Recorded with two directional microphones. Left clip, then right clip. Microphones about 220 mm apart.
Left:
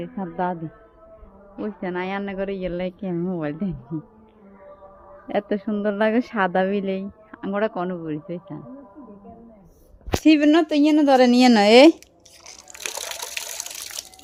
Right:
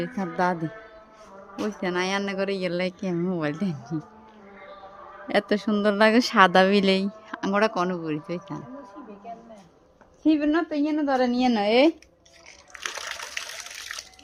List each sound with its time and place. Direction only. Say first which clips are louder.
0.0 s speech: right 1 dB; 15° right (ahead or behind)
5.3 s speech: right 1 dB; 15° right (ahead or behind)
10.2 s speech: left 6 dB; 30° left (ahead or behind)